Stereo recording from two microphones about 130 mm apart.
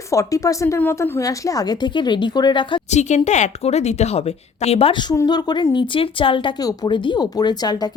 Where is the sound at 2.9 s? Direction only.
65° left (ahead or behind); by 5.1 s 40° left (ahead or behind).